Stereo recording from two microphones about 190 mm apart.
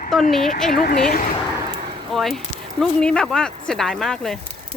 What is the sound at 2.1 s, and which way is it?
Speech, centre (ahead or behind).